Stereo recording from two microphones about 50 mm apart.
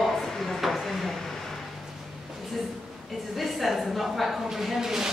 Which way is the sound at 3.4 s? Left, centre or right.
Centre.